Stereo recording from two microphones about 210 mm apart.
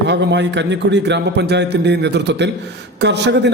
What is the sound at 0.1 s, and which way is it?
A man's voice, 55° right (ahead or behind).